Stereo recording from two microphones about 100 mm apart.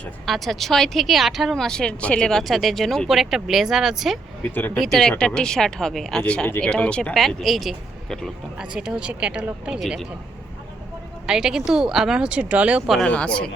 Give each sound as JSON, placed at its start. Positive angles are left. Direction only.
{"t": 0.3, "sound": "speech", "side_deg": 0}
{"t": 4.4, "sound": "speech", "side_deg": 15}
{"t": 4.8, "sound": "speech", "side_deg": 0}
{"t": 11.3, "sound": "speech", "side_deg": -5}
{"t": 13.1, "sound": "speech", "side_deg": 10}